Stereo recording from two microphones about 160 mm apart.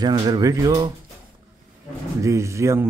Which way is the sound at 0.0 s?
25° right (ahead or behind).